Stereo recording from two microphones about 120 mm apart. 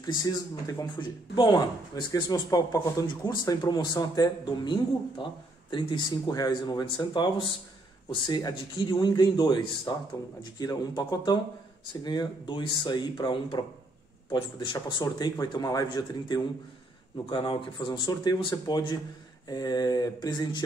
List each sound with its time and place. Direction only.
0.0 s speech: 30° left (ahead or behind)